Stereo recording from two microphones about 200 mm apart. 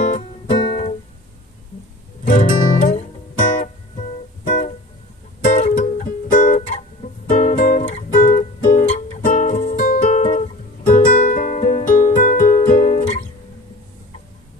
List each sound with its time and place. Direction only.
0.6 s music: 30° left (ahead or behind)
2.2 s guitar: 35° left (ahead or behind)
4.5 s music: 35° left (ahead or behind)